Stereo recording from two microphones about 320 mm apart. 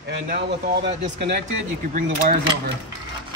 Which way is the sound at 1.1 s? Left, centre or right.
Right.